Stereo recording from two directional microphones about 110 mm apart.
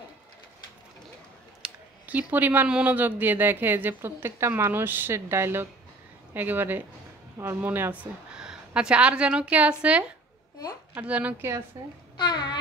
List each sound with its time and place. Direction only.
1.6 s a woman's voice: 15° right (ahead or behind)
11.7 s speech: 30° right (ahead or behind)
12.2 s a child's voice: 40° left (ahead or behind)